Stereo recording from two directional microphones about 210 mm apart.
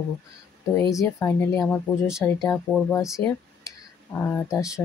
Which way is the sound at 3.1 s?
15° left (ahead or behind).